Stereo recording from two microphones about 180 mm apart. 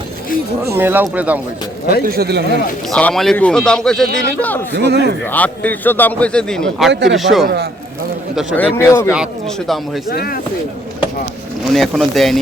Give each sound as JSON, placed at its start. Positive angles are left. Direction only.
{"t": 0.8, "sound": "speech", "side_deg": -10}
{"t": 2.0, "sound": "speech", "side_deg": -60}
{"t": 2.9, "sound": "a man's voice", "side_deg": 5}
{"t": 4.7, "sound": "speech", "side_deg": -70}
{"t": 5.2, "sound": "a man's voice", "side_deg": 10}
{"t": 6.9, "sound": "a man's voice", "side_deg": -80}
{"t": 7.2, "sound": "a man's voice", "side_deg": 0}
{"t": 7.4, "sound": "speech", "side_deg": -65}
{"t": 8.5, "sound": "a man's voice", "side_deg": 15}
{"t": 9.1, "sound": "a man's voice", "side_deg": 0}
{"t": 10.1, "sound": "speech", "side_deg": 55}
{"t": 11.7, "sound": "a man's voice", "side_deg": 0}